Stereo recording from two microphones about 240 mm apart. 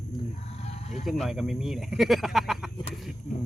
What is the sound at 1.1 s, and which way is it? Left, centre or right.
Speech, centre.